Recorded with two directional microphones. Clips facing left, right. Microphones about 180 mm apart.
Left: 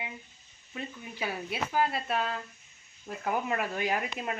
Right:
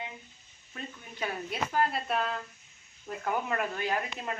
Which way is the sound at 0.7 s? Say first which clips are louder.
Left 3 dB; 5° left (ahead or behind).